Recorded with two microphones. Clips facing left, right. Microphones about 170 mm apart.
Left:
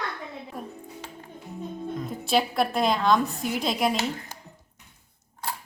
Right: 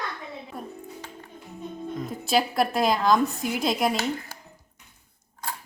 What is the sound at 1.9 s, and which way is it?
A woman's voice, centre (ahead or behind).